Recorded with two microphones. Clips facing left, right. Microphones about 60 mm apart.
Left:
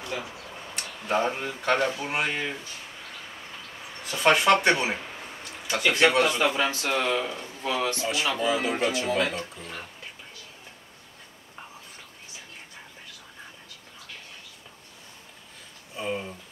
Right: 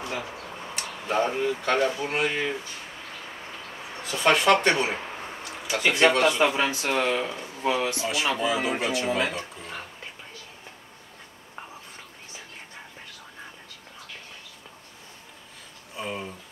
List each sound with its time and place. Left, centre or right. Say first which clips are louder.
0.0 s a sound: right 2 dB; right
0.7 s speech: right 1 dB; centre
4.2 s speech: even; centre
6.3 s speech: right 2 dB; centre
16.0 s speech: left 2 dB; centre